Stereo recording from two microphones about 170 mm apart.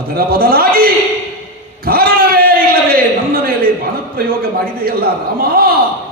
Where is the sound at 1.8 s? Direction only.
60° right (ahead or behind).